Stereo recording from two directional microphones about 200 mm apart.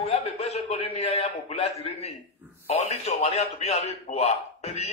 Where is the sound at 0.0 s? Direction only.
30° left (ahead or behind).